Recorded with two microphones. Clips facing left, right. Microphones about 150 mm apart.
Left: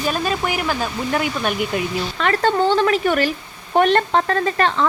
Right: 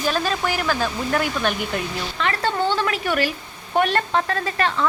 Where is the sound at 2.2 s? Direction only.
45° left (ahead or behind).